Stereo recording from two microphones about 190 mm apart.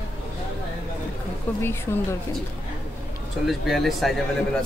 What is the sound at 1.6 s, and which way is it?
Speech, 10° left (ahead or behind).